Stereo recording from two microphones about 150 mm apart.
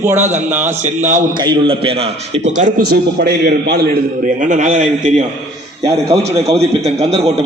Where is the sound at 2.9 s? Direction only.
90° right; by 5.2 s 50° right (ahead or behind).